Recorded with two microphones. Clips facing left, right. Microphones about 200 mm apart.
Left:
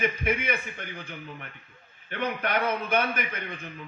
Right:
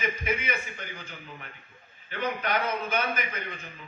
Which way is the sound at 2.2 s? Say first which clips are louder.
Left 1 dB; 55° left (ahead or behind).